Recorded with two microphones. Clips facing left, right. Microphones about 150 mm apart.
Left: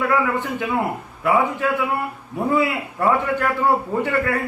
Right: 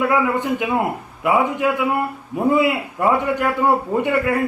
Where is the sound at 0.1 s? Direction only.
15° right (ahead or behind).